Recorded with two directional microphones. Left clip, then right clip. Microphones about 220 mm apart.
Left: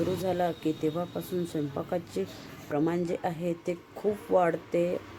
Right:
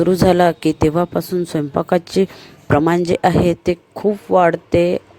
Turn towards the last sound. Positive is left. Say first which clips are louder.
# right 13 dB
turn(degrees=-40)  # may be behind; listen again after turning